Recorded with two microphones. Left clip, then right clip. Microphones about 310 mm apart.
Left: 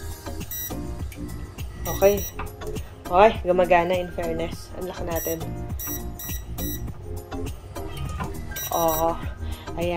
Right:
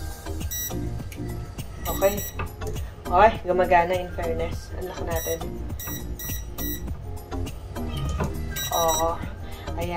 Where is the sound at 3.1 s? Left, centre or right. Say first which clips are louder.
Left 1 dB; left.